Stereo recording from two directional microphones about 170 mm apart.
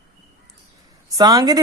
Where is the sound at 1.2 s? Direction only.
25° right (ahead or behind).